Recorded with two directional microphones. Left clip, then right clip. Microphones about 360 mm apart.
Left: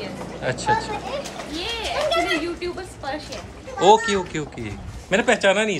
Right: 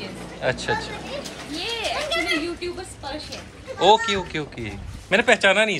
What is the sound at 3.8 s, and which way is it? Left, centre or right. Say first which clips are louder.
Speech: left 1 dB; centre.